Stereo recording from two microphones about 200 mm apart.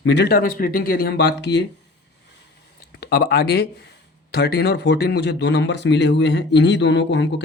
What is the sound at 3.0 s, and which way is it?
Speech, 50° left (ahead or behind).